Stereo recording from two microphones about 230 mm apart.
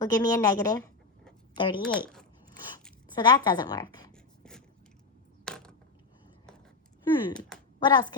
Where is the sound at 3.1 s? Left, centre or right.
Centre.